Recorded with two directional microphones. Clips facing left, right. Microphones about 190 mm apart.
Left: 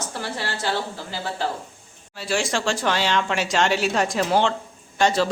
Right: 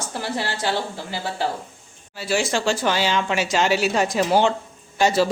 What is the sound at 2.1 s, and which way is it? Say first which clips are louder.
Speech: right 2 dB; 5° right (ahead or behind).